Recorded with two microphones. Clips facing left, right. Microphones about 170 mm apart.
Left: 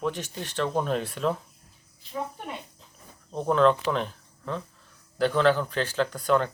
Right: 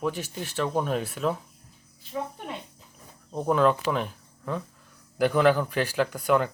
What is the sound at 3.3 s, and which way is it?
Speech, 10° right (ahead or behind).